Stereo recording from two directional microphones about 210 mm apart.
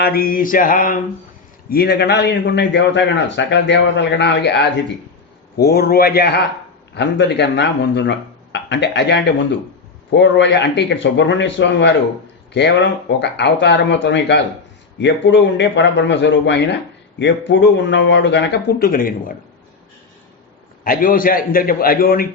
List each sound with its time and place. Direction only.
0.0 s mantra: 45° left (ahead or behind)
1.7 s a man's voice: 50° left (ahead or behind)
20.8 s a man's voice: 40° left (ahead or behind)